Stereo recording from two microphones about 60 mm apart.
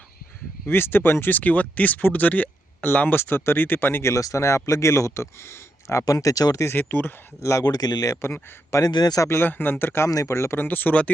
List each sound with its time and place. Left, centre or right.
0.7 s speech: left
4.1 s speech: left
6.7 s speech: left
7.6 s speech: left
9.3 s speech: left
10.1 s speech: left
10.6 s speech: left